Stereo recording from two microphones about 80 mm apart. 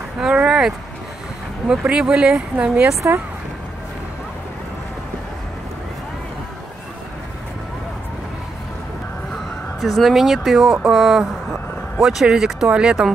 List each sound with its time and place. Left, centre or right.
0.2 s speech: centre
9.8 s speech: centre